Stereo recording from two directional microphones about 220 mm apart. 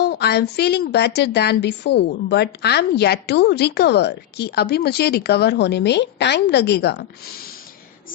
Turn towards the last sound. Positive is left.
turn(degrees=45)  # may be behind; listen again after turning